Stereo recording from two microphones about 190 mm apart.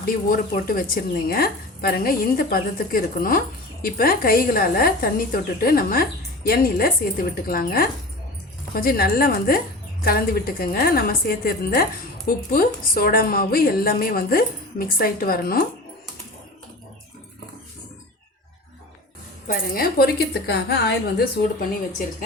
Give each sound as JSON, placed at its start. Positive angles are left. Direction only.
{"t": 0.0, "sound": "a woman's voice", "side_deg": 50}
{"t": 19.5, "sound": "a woman's voice", "side_deg": 50}